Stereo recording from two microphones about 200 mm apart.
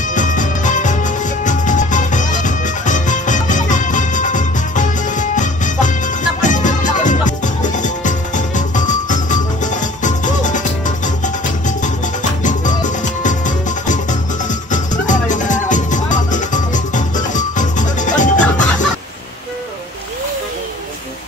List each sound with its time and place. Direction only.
0.1 s music: 40° left (ahead or behind)